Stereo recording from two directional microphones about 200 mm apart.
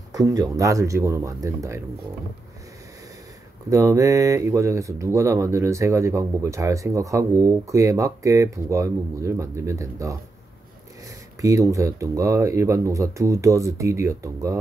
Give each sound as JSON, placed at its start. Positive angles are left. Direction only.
{"t": 0.1, "sound": "speech", "side_deg": -15}
{"t": 3.7, "sound": "speech", "side_deg": -15}
{"t": 11.4, "sound": "speech", "side_deg": -15}